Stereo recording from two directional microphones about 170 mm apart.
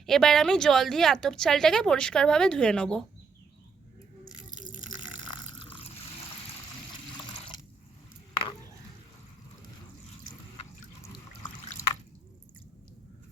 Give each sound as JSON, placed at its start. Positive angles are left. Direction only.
{"t": 0.0, "sound": "speech", "side_deg": 0}
{"t": 8.3, "sound": "a sound", "side_deg": 30}
{"t": 11.8, "sound": "drip", "side_deg": 20}